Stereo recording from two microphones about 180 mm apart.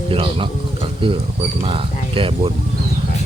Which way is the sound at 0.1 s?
30° right (ahead or behind).